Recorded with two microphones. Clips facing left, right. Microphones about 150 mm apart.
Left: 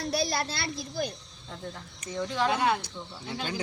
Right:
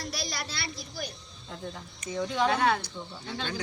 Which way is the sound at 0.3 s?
50° left (ahead or behind).